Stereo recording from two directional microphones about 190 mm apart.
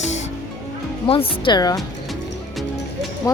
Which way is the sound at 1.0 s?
30° left (ahead or behind).